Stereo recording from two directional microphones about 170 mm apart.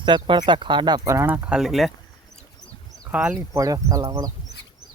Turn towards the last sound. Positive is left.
turn(degrees=-20)  # may be behind; listen again after turning